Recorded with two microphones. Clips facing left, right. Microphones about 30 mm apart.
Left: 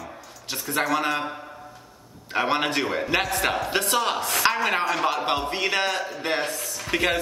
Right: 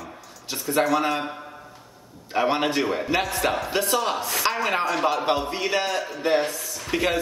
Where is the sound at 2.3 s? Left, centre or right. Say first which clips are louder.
Right 1 dB; centre.